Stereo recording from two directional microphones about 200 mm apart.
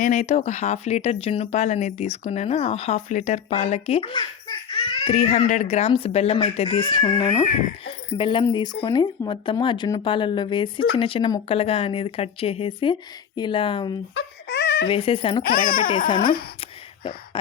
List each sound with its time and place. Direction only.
0.0 s speech: 40° left (ahead or behind)
5.0 s speech: 35° left (ahead or behind)
14.2 s wail: 55° left (ahead or behind)
14.8 s speech: 30° left (ahead or behind)
16.2 s speech: 45° left (ahead or behind)
16.6 s a sound: 25° left (ahead or behind)